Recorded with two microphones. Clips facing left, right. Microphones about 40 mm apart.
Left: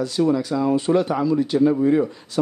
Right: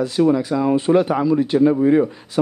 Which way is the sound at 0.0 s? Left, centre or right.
Right.